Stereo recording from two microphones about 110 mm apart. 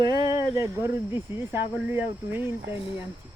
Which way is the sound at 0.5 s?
25° right (ahead or behind).